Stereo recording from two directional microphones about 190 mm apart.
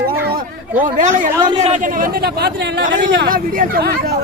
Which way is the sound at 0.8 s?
40° right (ahead or behind).